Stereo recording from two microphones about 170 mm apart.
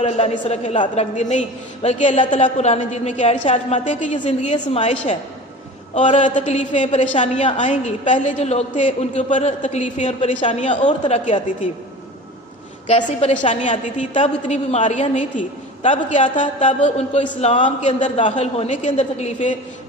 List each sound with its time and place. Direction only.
0.0 s a woman's voice: 40° left (ahead or behind)
11.3 s a woman's voice: 35° left (ahead or behind)
12.9 s a woman's voice: 45° left (ahead or behind)